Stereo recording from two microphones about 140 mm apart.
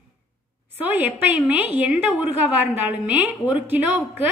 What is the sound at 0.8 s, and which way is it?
A woman's voice, 10° right (ahead or behind).